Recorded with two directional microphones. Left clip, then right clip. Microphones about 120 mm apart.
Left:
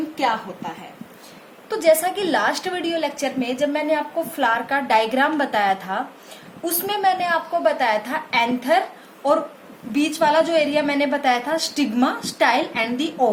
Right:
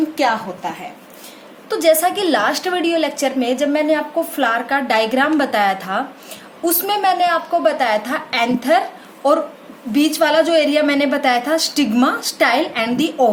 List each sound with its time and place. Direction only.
1.7 s a woman's voice: 20° right (ahead or behind)
9.9 s a woman's voice: 30° right (ahead or behind)